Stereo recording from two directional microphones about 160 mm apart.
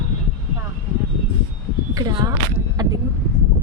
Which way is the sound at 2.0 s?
25° right (ahead or behind).